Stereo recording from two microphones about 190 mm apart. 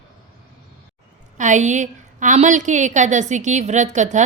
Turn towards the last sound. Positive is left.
turn(degrees=-40)  # may be behind; listen again after turning